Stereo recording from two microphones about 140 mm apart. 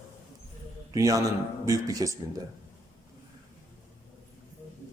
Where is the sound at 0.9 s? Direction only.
25° right (ahead or behind).